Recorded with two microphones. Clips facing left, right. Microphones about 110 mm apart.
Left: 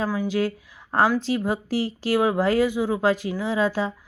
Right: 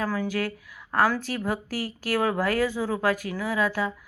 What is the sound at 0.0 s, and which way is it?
Speech, 20° left (ahead or behind).